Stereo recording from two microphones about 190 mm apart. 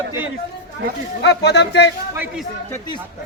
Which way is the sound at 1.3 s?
65° left (ahead or behind).